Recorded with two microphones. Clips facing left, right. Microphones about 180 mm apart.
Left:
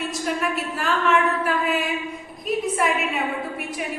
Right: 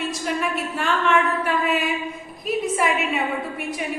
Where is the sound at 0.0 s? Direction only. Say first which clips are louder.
Even; centre (ahead or behind).